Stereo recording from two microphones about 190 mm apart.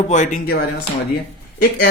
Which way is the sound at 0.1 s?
40° left (ahead or behind).